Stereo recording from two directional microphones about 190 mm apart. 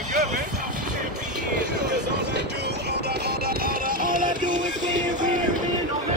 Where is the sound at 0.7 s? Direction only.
45° right (ahead or behind).